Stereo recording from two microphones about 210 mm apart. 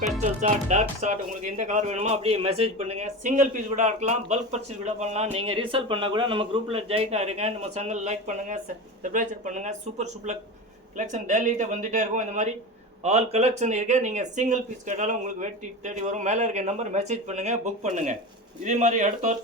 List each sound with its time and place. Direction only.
0.2 s speech: 35° right (ahead or behind)